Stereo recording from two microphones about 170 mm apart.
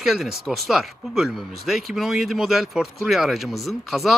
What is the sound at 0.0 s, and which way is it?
Speech, centre (ahead or behind).